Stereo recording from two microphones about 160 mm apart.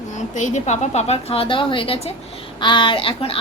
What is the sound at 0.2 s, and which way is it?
A woman's voice, 50° left (ahead or behind).